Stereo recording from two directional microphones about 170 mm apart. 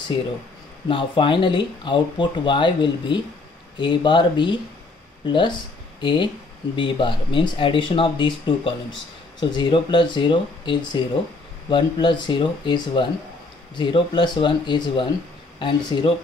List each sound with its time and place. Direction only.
0.8 s speech: 30° left (ahead or behind)